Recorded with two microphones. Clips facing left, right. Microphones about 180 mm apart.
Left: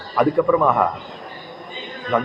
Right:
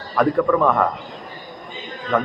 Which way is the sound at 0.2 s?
5° left (ahead or behind).